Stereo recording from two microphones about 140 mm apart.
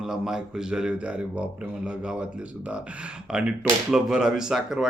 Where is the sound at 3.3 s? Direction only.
5° right (ahead or behind).